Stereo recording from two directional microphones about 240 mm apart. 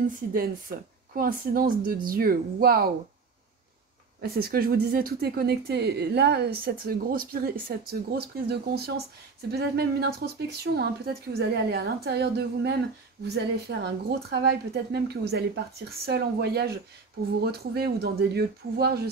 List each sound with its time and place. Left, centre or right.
0.3 s speech: right
4.2 s a woman's voice: right